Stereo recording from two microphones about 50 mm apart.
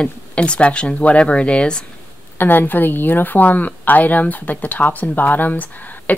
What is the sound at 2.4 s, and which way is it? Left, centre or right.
A woman's voice, left.